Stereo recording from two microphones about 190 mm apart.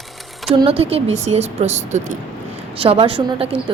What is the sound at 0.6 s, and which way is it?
A woman's voice, 30° right (ahead or behind).